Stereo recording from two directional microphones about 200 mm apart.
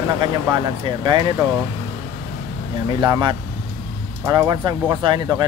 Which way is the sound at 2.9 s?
20° right (ahead or behind).